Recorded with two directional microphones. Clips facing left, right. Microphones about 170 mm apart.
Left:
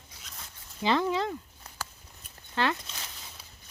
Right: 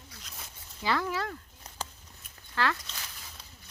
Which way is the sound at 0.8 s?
20° left (ahead or behind).